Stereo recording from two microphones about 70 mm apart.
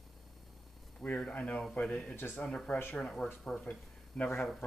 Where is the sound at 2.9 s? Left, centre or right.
Centre.